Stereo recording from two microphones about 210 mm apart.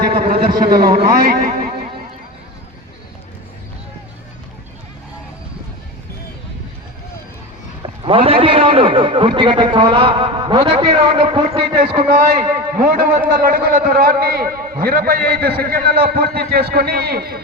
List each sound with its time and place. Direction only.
0.0 s a man's voice: 45° right (ahead or behind)
7.8 s a man's voice: 25° right (ahead or behind)
12.7 s a man's voice: 45° right (ahead or behind)